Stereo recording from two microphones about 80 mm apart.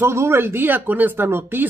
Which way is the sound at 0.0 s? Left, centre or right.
Right.